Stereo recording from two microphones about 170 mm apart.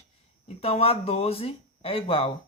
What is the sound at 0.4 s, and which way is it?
Speech, 35° left (ahead or behind).